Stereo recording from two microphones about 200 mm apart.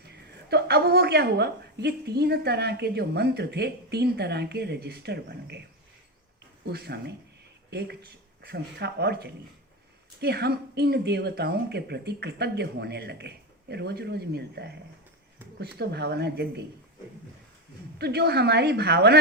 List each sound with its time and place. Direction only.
0.0 s a woman's voice: 55° right (ahead or behind)
6.7 s speech: 55° right (ahead or behind)
17.9 s speech: 55° right (ahead or behind)